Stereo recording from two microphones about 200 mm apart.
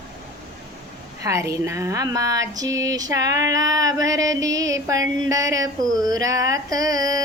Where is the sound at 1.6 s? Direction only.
15° right (ahead or behind).